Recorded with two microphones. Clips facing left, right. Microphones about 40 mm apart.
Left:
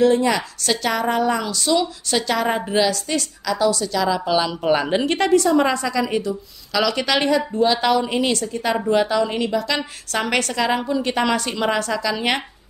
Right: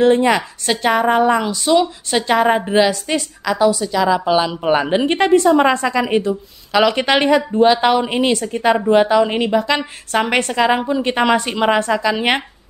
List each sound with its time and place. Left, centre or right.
0.0 s a woman's voice: right
5.1 s a woman's voice: right